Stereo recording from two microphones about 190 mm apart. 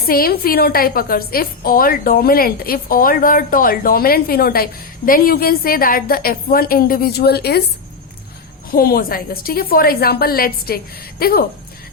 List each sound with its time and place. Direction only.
0.0 s a woman's voice: 50° left (ahead or behind)
8.7 s a woman's voice: 50° left (ahead or behind)